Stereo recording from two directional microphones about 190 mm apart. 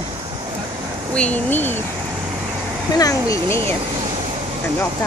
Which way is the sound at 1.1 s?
10° left (ahead or behind).